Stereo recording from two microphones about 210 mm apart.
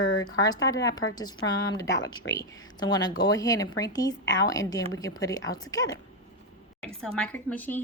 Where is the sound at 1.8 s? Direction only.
55° left (ahead or behind).